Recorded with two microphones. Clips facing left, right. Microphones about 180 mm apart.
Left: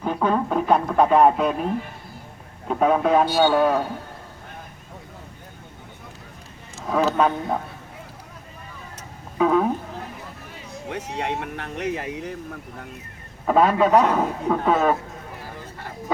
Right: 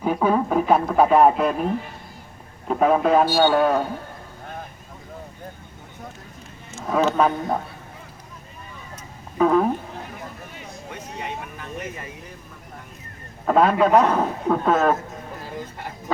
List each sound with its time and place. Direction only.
0.0 s speech: 10° right (ahead or behind)
2.6 s speech: centre (ahead or behind)
6.8 s speech: centre (ahead or behind)
9.4 s a sound: centre (ahead or behind)
10.8 s speech: 80° left
13.5 s speech: centre (ahead or behind)